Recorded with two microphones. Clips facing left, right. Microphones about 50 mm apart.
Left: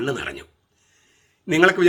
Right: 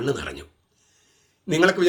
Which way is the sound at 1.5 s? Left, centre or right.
Left.